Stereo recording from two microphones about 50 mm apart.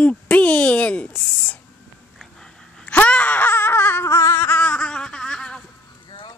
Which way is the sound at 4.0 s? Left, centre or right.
Left.